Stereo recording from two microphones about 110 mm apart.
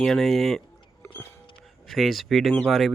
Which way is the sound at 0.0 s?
Centre (ahead or behind).